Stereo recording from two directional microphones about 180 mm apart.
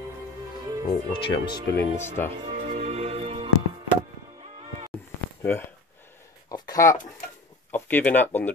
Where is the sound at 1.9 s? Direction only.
10° left (ahead or behind).